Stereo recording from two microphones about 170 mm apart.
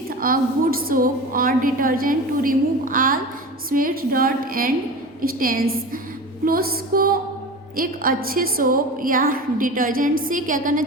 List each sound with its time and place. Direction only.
0.2 s a woman's voice: 60° right (ahead or behind)